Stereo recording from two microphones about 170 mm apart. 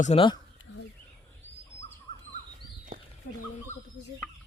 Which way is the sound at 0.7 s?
90° left.